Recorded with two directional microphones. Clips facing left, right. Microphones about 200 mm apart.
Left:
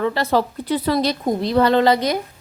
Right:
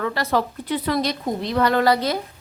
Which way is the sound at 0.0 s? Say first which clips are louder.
Left 3 dB; 25° left (ahead or behind).